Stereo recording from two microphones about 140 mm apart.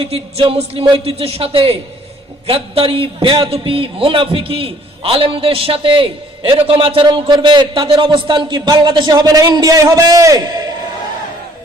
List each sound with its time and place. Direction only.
0.0 s a man's voice: 45° right (ahead or behind); by 10.6 s 30° right (ahead or behind)